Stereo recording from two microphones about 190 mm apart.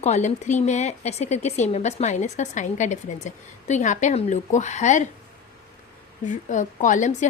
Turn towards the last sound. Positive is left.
turn(degrees=40)  # may be behind; listen again after turning